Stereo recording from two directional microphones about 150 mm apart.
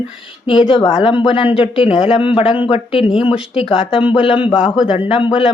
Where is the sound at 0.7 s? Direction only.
35° left (ahead or behind).